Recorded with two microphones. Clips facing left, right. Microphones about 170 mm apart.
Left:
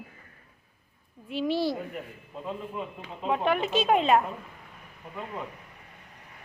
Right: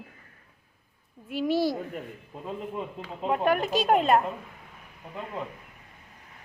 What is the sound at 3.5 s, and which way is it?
Speech, 40° right (ahead or behind).